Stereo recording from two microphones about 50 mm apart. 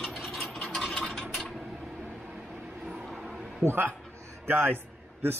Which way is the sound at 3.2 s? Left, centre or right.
Centre.